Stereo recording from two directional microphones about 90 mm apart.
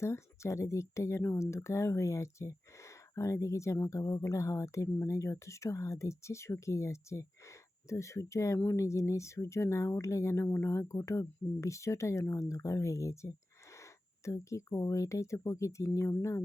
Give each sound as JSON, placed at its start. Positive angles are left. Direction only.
{"t": 0.0, "sound": "speech", "side_deg": 30}